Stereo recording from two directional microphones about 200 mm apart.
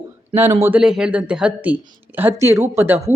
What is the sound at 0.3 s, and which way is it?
Speech, 10° right (ahead or behind).